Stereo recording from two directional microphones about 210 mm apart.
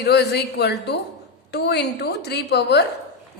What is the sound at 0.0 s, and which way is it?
A woman's voice, 50° left (ahead or behind).